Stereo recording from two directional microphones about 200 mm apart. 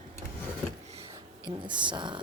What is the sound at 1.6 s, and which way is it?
Speech, 25° right (ahead or behind).